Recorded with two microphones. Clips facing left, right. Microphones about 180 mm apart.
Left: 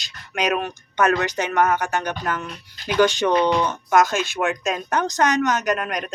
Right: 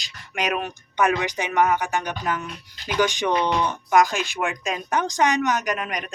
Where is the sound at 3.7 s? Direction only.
15° right (ahead or behind).